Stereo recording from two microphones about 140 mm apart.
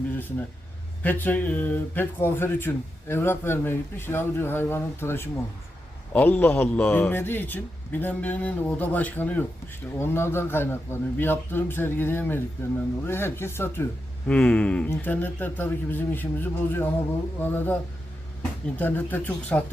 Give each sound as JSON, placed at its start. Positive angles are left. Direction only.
{"t": 0.2, "sound": "speech", "side_deg": 15}
{"t": 18.8, "sound": "speech", "side_deg": 15}